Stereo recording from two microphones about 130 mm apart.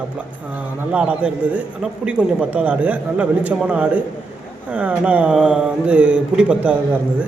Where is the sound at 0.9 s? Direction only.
10° right (ahead or behind).